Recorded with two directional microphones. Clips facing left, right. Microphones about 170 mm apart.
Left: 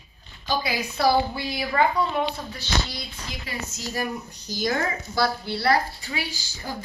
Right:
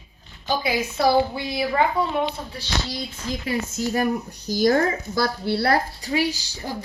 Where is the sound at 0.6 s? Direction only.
20° right (ahead or behind).